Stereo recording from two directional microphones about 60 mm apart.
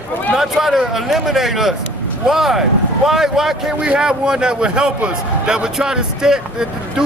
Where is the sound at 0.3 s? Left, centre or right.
Centre.